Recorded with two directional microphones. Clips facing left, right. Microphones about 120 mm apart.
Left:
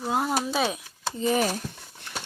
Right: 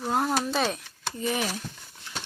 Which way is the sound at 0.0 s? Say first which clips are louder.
Even; 5° left (ahead or behind).